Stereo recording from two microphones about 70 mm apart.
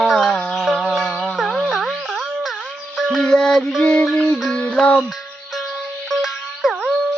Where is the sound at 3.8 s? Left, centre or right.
Centre.